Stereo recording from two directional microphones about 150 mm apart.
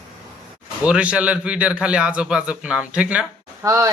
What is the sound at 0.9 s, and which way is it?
A man's voice, 5° right (ahead or behind).